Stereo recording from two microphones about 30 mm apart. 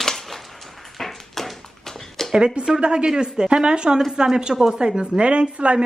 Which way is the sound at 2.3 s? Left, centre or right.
Right.